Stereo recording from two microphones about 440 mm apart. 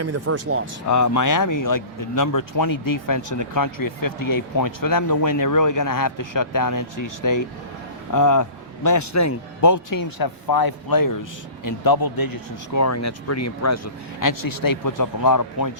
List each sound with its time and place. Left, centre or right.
0.0 s speech: right
0.9 s a man's voice: left